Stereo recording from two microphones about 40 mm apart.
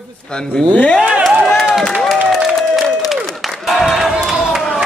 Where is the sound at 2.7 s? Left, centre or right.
Centre.